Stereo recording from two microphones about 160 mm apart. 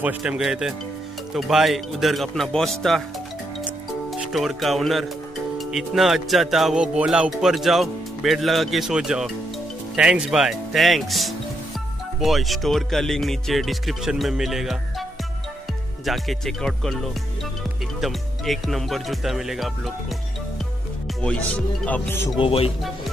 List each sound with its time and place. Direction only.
0.0 s music: 10° right (ahead or behind)
4.3 s music: centre (ahead or behind)
16.1 s music: centre (ahead or behind)
21.2 s speech: 10° left (ahead or behind)
22.4 s speech: 35° left (ahead or behind)